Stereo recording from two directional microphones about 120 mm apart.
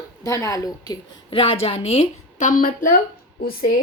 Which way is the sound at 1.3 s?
55° left (ahead or behind).